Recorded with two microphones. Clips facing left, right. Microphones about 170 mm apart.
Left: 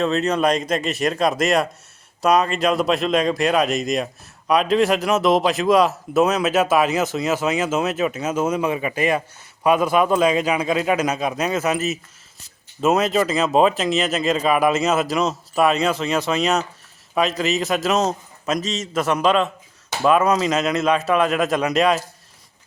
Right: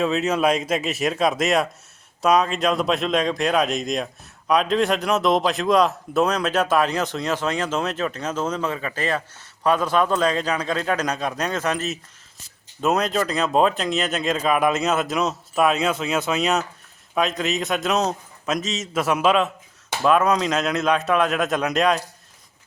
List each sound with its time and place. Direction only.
0.0 s speech: 5° right (ahead or behind)